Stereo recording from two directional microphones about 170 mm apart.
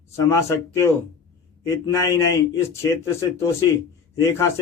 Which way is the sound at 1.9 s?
20° left (ahead or behind).